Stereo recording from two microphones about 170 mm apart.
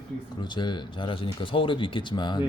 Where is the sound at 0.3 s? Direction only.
25° left (ahead or behind).